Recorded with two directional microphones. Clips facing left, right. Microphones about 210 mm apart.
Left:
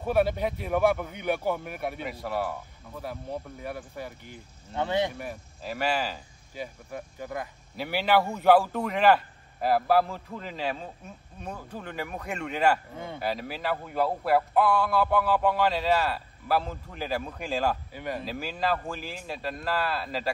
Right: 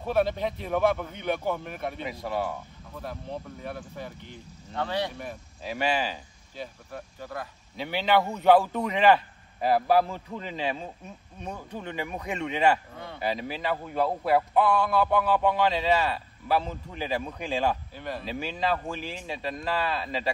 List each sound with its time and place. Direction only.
0.0 s speech: 10° left (ahead or behind)
5.1 s speech: 5° left (ahead or behind)
12.9 s speech: 20° left (ahead or behind)
13.2 s speech: centre (ahead or behind)